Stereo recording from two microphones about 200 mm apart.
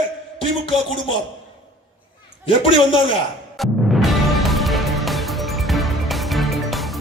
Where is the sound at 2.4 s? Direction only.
25° left (ahead or behind).